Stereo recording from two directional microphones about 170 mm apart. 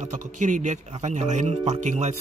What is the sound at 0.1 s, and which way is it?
Speech, 45° right (ahead or behind).